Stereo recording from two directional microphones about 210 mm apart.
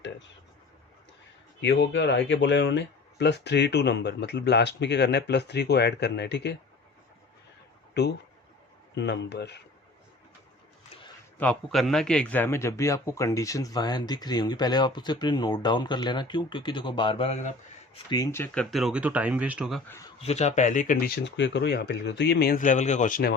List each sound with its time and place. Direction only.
1.6 s speech: 60° left (ahead or behind)
8.0 s speech: 50° left (ahead or behind)
11.3 s speech: 5° left (ahead or behind); by 17.5 s 30° left (ahead or behind)
17.9 s speech: 20° left (ahead or behind); by 19.8 s 5° right (ahead or behind)
20.2 s speech: 30° left (ahead or behind)